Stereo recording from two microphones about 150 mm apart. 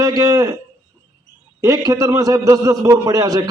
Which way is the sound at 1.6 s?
20° right (ahead or behind).